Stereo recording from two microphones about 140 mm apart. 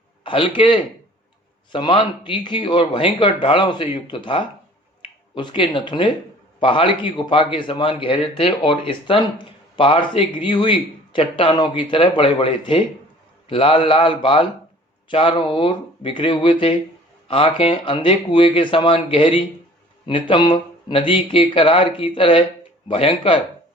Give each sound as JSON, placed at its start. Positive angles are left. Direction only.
{"t": 0.3, "sound": "a man's voice", "side_deg": 35}